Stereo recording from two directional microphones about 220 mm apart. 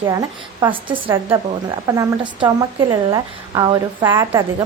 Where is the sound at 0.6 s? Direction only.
25° right (ahead or behind).